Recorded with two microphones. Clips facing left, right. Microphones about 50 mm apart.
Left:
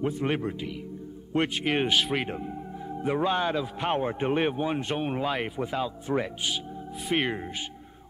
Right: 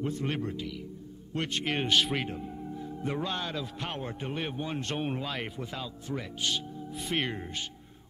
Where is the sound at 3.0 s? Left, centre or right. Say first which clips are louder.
Left 8 dB; left.